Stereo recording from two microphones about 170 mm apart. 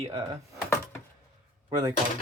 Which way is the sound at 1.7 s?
20° right (ahead or behind).